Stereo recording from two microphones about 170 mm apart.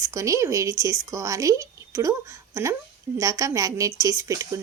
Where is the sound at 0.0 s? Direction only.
20° right (ahead or behind).